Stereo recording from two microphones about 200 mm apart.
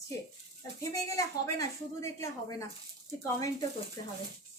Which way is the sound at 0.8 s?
15° left (ahead or behind).